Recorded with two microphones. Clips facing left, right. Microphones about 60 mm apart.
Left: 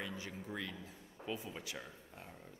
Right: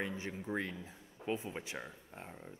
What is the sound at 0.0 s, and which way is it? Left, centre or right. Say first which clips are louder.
Speech: right 5 dB; right.